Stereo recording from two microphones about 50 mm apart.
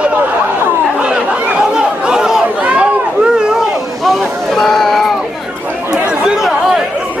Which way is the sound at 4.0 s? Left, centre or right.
Centre.